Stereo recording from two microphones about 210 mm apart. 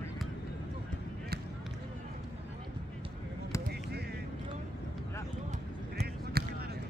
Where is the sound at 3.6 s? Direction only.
50° right (ahead or behind).